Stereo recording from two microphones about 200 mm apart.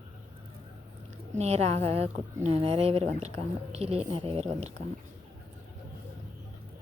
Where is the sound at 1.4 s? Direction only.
30° right (ahead or behind).